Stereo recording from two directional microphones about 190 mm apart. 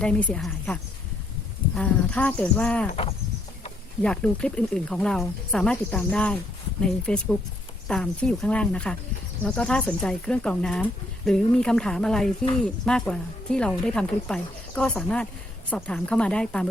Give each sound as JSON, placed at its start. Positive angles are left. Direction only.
{"t": 0.0, "sound": "speech", "side_deg": 5}
{"t": 2.9, "sound": "cricket", "side_deg": 30}
{"t": 4.0, "sound": "speech", "side_deg": 5}